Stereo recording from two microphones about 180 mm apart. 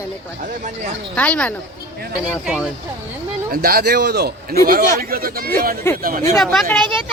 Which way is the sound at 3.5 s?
55° right (ahead or behind).